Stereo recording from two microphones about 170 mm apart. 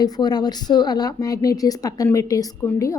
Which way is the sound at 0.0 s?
25° left (ahead or behind).